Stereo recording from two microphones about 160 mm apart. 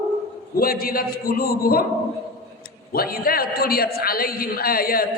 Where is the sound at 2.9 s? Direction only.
70° left (ahead or behind).